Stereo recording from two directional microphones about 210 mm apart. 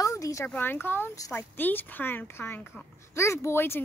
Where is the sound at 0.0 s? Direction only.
15° left (ahead or behind).